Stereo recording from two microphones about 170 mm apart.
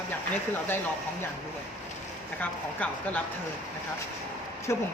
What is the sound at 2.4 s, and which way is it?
Speech, 10° left (ahead or behind).